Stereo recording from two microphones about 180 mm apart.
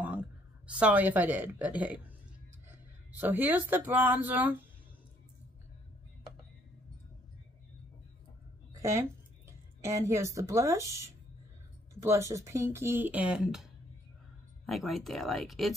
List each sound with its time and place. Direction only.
0.0 s a woman's voice: 5° right (ahead or behind)
3.1 s speech: 10° right (ahead or behind)
8.7 s a sound: 15° right (ahead or behind)
9.8 s speech: 15° right (ahead or behind)
14.7 s speech: centre (ahead or behind)